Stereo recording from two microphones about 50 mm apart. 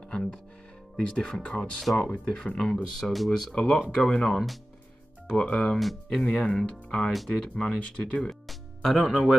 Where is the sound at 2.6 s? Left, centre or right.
Centre.